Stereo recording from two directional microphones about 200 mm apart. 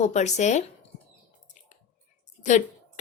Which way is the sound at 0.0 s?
35° left (ahead or behind).